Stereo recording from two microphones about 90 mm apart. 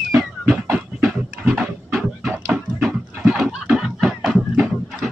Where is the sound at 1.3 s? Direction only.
10° right (ahead or behind).